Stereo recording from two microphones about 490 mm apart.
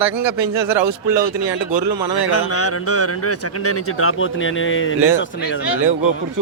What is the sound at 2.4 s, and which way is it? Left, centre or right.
A man's voice, left.